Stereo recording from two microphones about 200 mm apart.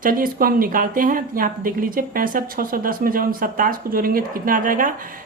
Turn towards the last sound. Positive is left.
turn(degrees=-45)  # may be behind; listen again after turning